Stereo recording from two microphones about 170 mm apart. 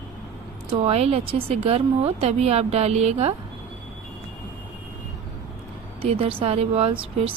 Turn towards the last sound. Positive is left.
turn(degrees=-35)  # may be behind; listen again after turning